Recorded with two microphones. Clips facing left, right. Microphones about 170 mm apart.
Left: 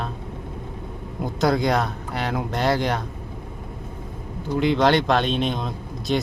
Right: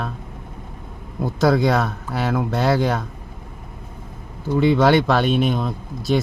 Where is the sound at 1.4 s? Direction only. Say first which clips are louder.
Right 3 dB; 5° right (ahead or behind).